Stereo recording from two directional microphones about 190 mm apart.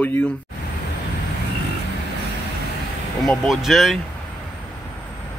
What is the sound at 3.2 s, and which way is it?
Speech, centre (ahead or behind).